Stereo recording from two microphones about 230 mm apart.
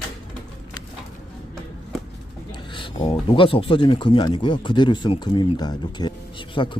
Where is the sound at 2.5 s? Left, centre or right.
Left.